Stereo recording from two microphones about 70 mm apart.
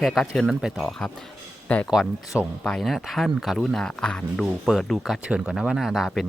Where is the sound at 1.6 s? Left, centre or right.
Left.